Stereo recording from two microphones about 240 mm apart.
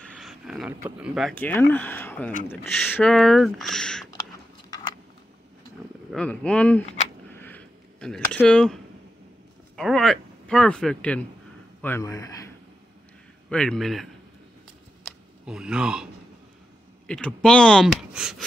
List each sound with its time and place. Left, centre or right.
0.0 s speech: centre
4.2 s a sound: centre
6.1 s speech: centre
7.2 s a sound: centre
9.8 s a man's voice: centre
13.5 s speech: centre
15.4 s speech: centre
17.1 s speech: centre